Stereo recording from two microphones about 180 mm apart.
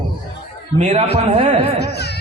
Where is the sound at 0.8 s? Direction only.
40° right (ahead or behind).